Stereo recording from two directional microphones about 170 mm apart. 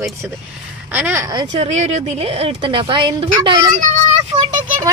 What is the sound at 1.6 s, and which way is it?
A woman's voice, 40° right (ahead or behind).